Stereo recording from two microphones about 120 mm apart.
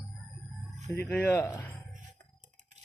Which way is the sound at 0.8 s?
25° left (ahead or behind).